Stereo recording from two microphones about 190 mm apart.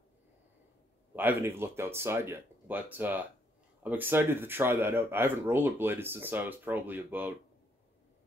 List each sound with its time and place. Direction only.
1.1 s speech: 10° right (ahead or behind)